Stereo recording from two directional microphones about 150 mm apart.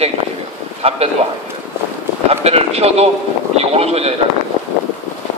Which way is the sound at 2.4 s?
45° right (ahead or behind).